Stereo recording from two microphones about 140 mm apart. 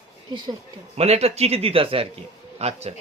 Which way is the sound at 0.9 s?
50° right (ahead or behind).